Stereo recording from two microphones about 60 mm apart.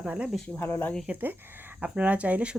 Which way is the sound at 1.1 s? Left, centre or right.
Right.